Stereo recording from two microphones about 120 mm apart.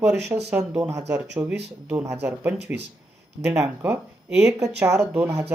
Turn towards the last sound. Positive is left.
turn(degrees=-20)  # may be behind; listen again after turning